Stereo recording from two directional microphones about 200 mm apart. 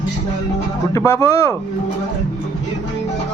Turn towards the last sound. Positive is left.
turn(degrees=15)  # may be behind; listen again after turning